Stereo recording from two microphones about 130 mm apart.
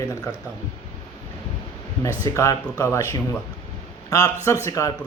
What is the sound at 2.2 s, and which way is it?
Speech, 25° left (ahead or behind).